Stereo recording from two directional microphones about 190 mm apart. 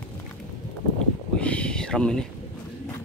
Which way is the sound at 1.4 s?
5° left (ahead or behind).